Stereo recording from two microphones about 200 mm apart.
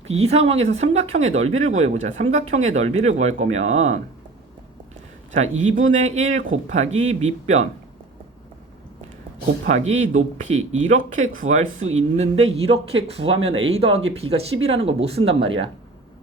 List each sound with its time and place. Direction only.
0.2 s speech: 30° right (ahead or behind)
5.3 s speech: 35° right (ahead or behind)
9.6 s speech: 35° right (ahead or behind)